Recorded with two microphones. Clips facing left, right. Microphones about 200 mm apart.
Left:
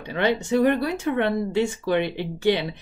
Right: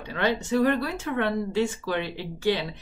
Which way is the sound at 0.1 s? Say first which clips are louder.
Left 3 dB; 20° left (ahead or behind).